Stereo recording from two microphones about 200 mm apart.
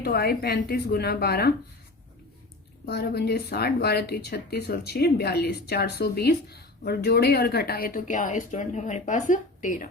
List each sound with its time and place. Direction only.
0.0 s speech: 50° left (ahead or behind)
2.8 s speech: 55° left (ahead or behind)